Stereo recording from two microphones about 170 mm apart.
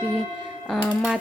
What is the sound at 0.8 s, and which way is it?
Speech, 5° right (ahead or behind).